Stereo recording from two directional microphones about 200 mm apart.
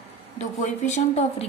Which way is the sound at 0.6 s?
35° left (ahead or behind).